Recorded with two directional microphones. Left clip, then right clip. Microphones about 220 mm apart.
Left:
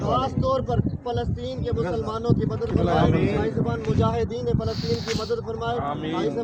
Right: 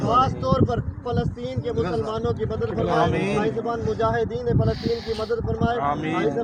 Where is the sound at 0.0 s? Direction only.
30° right (ahead or behind).